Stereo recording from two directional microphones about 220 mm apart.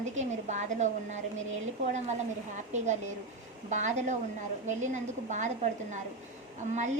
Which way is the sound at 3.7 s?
35° right (ahead or behind).